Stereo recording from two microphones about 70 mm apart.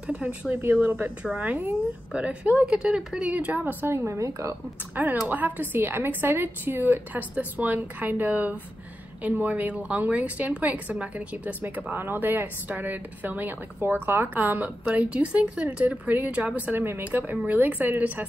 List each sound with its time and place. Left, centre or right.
0.0 s speech: centre
0.6 s a woman's voice: right; by 3.3 s centre
3.3 s a woman's voice: centre; by 4.6 s right
4.9 s a woman's voice: right